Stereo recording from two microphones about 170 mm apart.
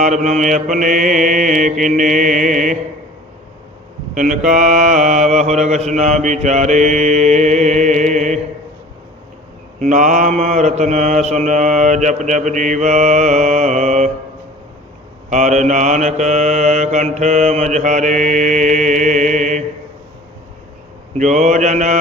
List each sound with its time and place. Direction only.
0.0 s mantra: 45° right (ahead or behind)
4.1 s mantra: 50° right (ahead or behind)
9.8 s mantra: 50° right (ahead or behind)
15.3 s mantra: 45° right (ahead or behind)
21.2 s mantra: 45° right (ahead or behind)